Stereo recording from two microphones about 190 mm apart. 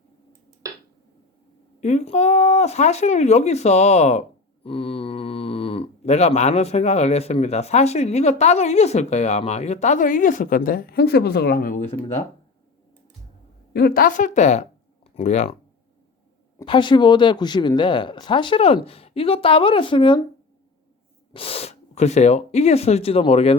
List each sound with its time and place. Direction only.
1.8 s speech: 35° left (ahead or behind)
13.7 s a woman's voice: 50° left (ahead or behind)
16.6 s speech: 25° left (ahead or behind)
21.3 s speech: 30° left (ahead or behind)